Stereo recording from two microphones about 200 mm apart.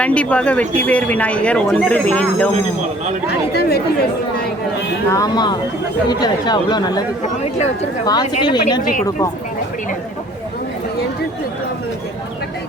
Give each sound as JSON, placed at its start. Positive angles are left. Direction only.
{"t": 0.0, "sound": "speech", "side_deg": 5}
{"t": 3.5, "sound": "speech", "side_deg": 50}
{"t": 5.1, "sound": "speech", "side_deg": 20}
{"t": 8.0, "sound": "speech", "side_deg": 20}